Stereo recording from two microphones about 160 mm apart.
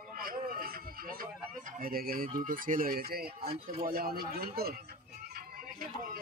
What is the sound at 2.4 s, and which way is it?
Speech, 60° right (ahead or behind).